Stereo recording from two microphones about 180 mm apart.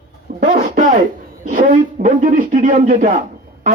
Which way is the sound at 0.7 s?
45° right (ahead or behind).